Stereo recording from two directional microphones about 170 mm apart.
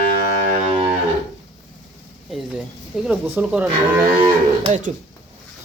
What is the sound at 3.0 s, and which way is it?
Speech, 10° right (ahead or behind).